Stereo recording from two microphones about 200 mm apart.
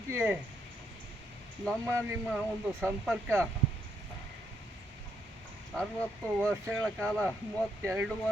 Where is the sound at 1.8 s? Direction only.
15° right (ahead or behind).